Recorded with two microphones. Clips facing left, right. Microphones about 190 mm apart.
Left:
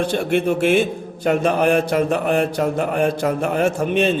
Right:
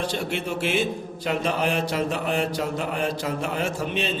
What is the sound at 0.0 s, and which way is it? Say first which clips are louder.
A man's voice: left 9 dB; 55° left (ahead or behind).